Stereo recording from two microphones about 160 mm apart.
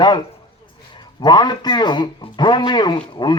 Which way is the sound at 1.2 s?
25° left (ahead or behind).